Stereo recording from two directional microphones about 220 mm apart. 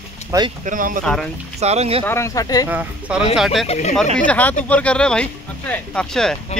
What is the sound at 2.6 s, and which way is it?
Speech, 5° right (ahead or behind).